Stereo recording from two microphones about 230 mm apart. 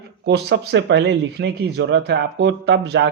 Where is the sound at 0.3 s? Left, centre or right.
Right.